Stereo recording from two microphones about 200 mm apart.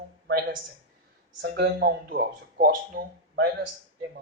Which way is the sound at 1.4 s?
55° right (ahead or behind).